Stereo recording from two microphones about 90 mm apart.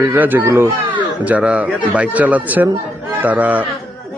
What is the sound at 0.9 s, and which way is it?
Speech, 15° right (ahead or behind).